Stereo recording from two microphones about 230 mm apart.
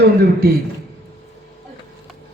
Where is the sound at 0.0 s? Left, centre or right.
Right.